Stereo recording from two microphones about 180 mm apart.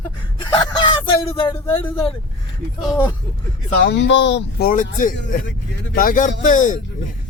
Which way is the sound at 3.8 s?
70° left (ahead or behind).